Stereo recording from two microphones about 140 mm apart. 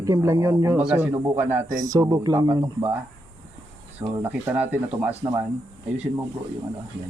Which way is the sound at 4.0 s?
15° right (ahead or behind).